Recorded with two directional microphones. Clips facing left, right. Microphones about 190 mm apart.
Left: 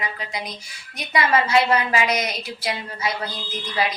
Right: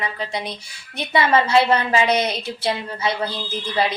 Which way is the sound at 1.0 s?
30° right (ahead or behind).